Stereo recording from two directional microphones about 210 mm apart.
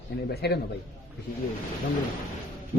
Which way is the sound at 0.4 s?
50° left (ahead or behind).